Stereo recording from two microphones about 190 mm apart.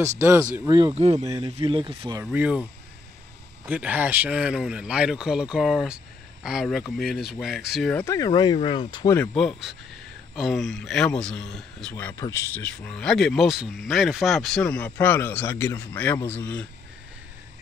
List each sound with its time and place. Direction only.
0.7 s speech: 20° right (ahead or behind)
0.9 s speech: 35° right (ahead or behind)
1.2 s speech: 20° right (ahead or behind)
2.1 s speech: 10° right (ahead or behind)
3.6 s speech: 10° right (ahead or behind); by 9.2 s 20° left (ahead or behind)
9.2 s speech: 5° left (ahead or behind)